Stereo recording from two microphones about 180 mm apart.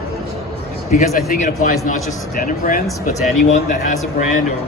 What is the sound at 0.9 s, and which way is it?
A man's voice, 50° left (ahead or behind).